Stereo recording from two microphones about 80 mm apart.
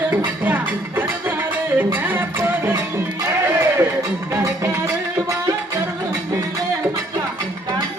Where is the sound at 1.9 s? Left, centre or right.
Right.